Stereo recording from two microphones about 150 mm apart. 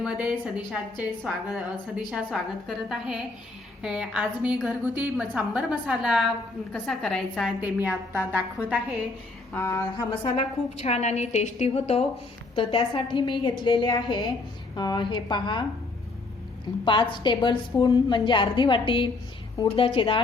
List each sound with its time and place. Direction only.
0.1 s a woman's voice: 5° right (ahead or behind)
7.6 s a woman's voice: 15° right (ahead or behind)
9.5 s a sound: 15° left (ahead or behind)
10.8 s a woman's voice: 45° left (ahead or behind); by 15.6 s 30° left (ahead or behind)
16.8 s a woman's voice: 35° left (ahead or behind)